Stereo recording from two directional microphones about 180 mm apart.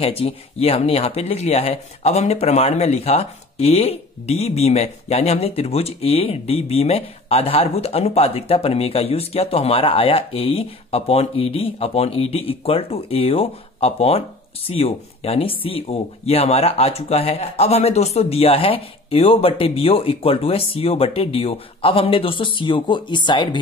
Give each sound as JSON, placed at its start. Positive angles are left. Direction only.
{"t": 0.0, "sound": "speech", "side_deg": 35}